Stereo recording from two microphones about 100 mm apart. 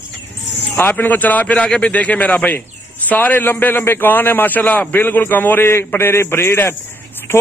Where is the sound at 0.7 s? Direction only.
20° left (ahead or behind).